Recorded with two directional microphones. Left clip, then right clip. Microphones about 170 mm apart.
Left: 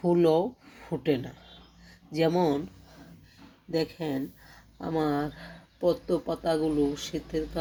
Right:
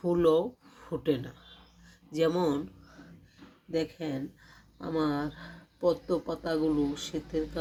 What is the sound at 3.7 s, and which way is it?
Speech, 5° left (ahead or behind).